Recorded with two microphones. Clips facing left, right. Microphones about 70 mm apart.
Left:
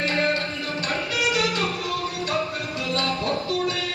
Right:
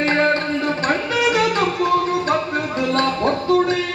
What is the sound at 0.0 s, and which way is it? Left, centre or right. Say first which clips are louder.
Music: right 6 dB; right.